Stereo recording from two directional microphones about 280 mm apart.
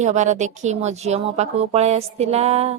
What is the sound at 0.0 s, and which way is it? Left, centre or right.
Speech, right.